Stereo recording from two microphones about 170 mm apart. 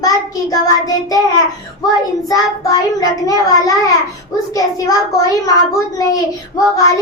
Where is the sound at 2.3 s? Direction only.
20° left (ahead or behind).